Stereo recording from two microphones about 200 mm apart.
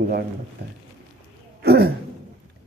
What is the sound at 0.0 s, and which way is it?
Speech, 50° right (ahead or behind).